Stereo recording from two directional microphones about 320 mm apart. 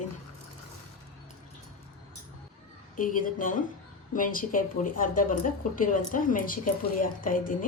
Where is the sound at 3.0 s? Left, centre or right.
Left.